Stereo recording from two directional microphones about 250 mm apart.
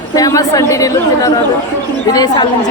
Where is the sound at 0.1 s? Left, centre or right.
Centre.